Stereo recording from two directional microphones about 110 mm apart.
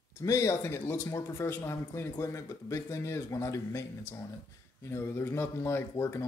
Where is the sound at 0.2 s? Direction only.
30° left (ahead or behind).